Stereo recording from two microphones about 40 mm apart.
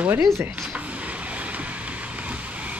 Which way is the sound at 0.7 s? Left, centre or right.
Right.